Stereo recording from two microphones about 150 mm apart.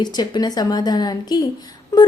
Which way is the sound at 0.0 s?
25° left (ahead or behind).